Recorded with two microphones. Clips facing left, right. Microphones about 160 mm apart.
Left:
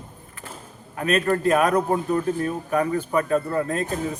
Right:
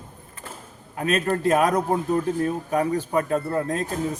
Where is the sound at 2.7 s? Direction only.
25° right (ahead or behind).